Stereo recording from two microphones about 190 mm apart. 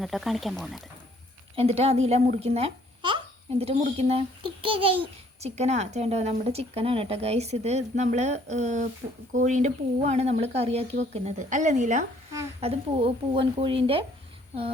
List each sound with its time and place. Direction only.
0.0 s speech: centre (ahead or behind)
1.5 s a child's voice: 30° right (ahead or behind)